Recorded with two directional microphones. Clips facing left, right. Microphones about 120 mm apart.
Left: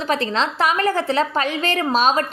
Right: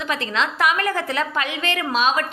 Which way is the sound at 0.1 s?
35° left (ahead or behind).